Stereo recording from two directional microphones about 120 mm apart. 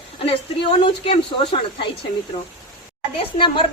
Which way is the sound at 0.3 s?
50° left (ahead or behind).